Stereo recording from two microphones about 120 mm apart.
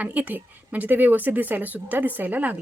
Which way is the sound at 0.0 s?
15° right (ahead or behind).